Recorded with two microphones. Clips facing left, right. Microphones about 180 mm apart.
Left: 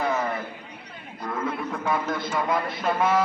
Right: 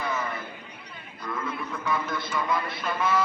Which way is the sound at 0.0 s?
40° left (ahead or behind).